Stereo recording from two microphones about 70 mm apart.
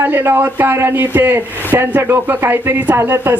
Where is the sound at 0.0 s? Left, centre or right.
Right.